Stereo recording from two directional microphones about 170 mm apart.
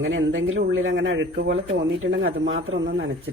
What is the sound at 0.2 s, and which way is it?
Speech, 90° right.